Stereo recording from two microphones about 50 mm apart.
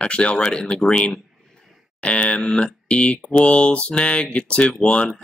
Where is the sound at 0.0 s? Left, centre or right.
Left.